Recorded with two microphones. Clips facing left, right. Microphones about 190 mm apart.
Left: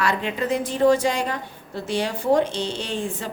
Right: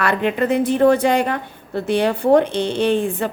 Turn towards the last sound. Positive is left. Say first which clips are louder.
# right 10 dB
turn(degrees=-60)  # may be behind; listen again after turning